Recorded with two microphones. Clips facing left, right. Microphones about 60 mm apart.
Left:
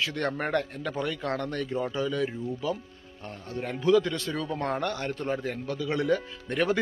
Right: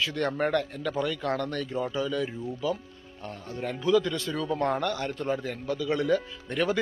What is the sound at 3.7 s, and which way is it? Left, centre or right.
Speech, left.